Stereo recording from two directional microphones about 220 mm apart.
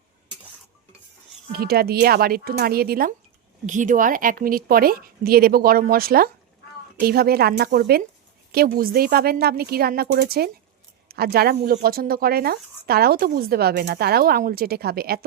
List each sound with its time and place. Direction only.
1.5 s a woman's voice: 45° right (ahead or behind)